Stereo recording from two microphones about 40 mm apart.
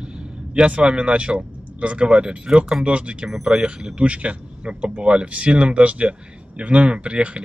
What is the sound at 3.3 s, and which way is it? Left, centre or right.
Speech, centre.